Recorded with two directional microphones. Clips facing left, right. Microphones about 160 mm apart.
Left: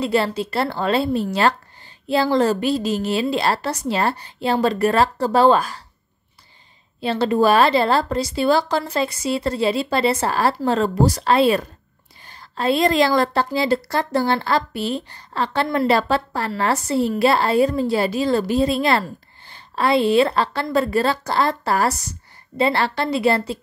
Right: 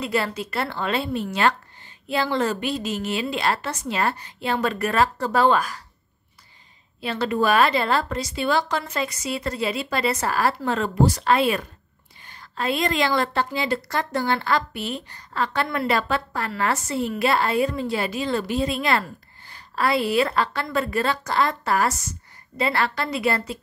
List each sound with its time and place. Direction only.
0.0 s a woman's voice: 30° left (ahead or behind)
7.0 s a woman's voice: 30° left (ahead or behind)